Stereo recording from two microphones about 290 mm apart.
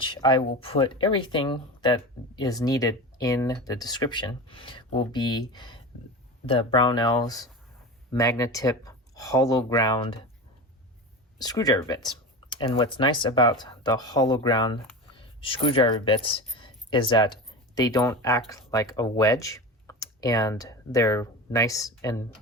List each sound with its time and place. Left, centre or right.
0.0 s speech: centre
11.3 s speech: centre